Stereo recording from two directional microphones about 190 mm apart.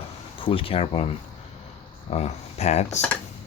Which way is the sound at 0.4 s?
30° left (ahead or behind).